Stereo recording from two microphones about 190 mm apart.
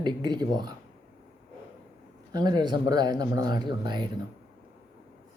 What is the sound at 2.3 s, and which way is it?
Speech, 20° right (ahead or behind).